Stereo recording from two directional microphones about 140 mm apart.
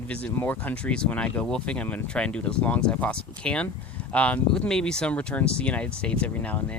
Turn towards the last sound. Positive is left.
turn(degrees=10)  # may be behind; listen again after turning